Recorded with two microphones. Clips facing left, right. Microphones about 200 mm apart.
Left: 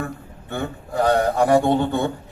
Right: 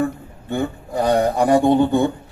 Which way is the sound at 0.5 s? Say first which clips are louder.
Right 3 dB; 15° right (ahead or behind).